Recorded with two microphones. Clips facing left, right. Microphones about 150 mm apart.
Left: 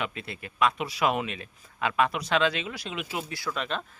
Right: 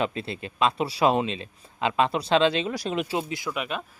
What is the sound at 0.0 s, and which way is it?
Speech, 30° right (ahead or behind).